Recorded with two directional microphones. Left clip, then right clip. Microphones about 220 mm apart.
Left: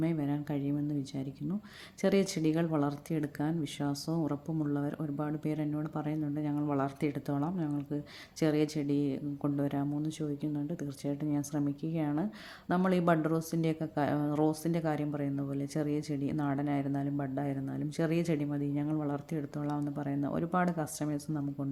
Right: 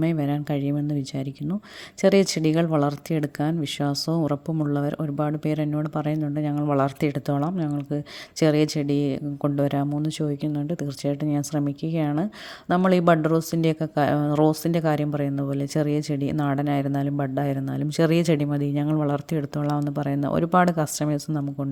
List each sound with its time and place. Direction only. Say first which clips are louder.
0.0 s speech: right 8 dB; 40° right (ahead or behind)
2.0 s speech: right 10 dB; 40° right (ahead or behind)